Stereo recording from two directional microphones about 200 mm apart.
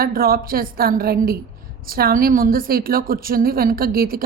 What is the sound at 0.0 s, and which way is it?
A woman's voice, 50° right (ahead or behind).